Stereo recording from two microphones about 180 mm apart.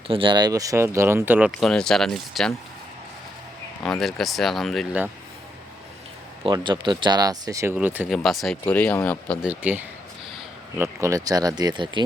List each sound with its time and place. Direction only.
0.1 s speech: 30° right (ahead or behind); by 1.5 s 10° right (ahead or behind)
1.6 s speech: 5° left (ahead or behind)
3.8 s speech: centre (ahead or behind)
6.4 s speech: 25° right (ahead or behind); by 9.4 s 10° left (ahead or behind)
9.4 s speech: 10° right (ahead or behind); by 12.0 s 25° right (ahead or behind)